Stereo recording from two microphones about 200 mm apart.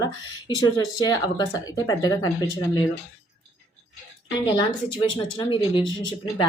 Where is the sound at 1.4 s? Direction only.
20° left (ahead or behind).